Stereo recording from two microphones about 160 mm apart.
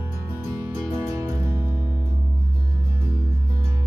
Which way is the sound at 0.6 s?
15° right (ahead or behind).